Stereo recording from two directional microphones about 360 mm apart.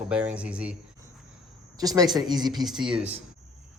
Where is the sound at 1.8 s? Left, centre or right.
Centre.